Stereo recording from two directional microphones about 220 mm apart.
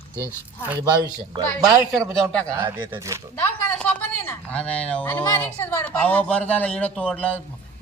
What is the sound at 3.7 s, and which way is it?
A woman's voice, 5° left (ahead or behind).